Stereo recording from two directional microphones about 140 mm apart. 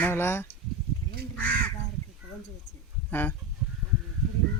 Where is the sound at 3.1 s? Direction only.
15° left (ahead or behind).